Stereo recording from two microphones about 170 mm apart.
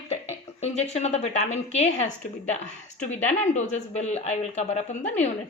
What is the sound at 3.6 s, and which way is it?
A man's voice, 45° left (ahead or behind).